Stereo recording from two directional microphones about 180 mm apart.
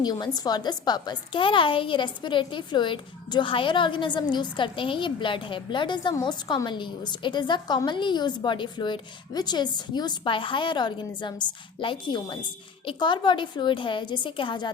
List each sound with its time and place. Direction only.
0.0 s a woman's voice: 20° left (ahead or behind)